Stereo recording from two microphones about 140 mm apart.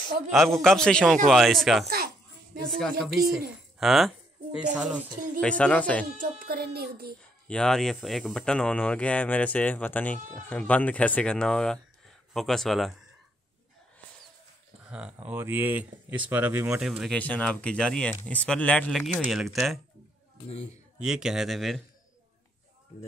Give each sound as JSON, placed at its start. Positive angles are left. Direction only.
{"t": 0.3, "sound": "speech", "side_deg": 0}
{"t": 3.8, "sound": "a sound", "side_deg": 0}
{"t": 4.7, "sound": "speech", "side_deg": -10}
{"t": 5.4, "sound": "speech", "side_deg": 5}
{"t": 6.1, "sound": "speech", "side_deg": -90}
{"t": 7.4, "sound": "speech", "side_deg": 5}
{"t": 14.9, "sound": "speech", "side_deg": -10}
{"t": 17.0, "sound": "speech", "side_deg": 10}
{"t": 21.0, "sound": "speech", "side_deg": -5}